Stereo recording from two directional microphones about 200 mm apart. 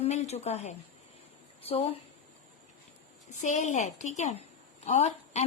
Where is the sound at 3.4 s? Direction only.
35° left (ahead or behind).